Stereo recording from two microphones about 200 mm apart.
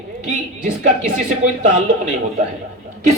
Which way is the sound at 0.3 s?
40° right (ahead or behind).